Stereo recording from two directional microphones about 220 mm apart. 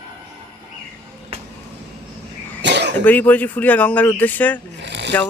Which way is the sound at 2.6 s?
50° right (ahead or behind).